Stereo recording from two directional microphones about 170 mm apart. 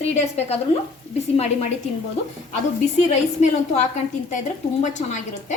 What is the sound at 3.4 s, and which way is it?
A woman's voice, 40° left (ahead or behind).